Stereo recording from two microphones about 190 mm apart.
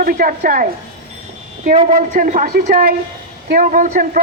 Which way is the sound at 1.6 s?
35° right (ahead or behind).